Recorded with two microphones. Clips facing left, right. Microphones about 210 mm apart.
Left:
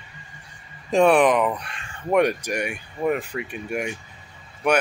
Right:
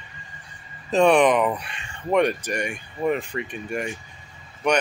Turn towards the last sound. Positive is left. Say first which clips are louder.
# left 1 dB
turn(degrees=5)  # may be behind; listen again after turning